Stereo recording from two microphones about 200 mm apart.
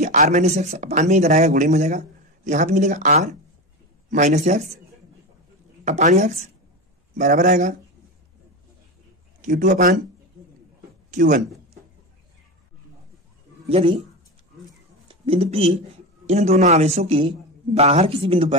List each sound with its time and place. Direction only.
0.0 s speech: 35° right (ahead or behind)
5.9 s speech: 35° right (ahead or behind)
9.4 s speech: 40° right (ahead or behind)
11.1 s speech: 40° right (ahead or behind)
13.7 s speech: 30° right (ahead or behind)
15.0 s speech: 30° right (ahead or behind)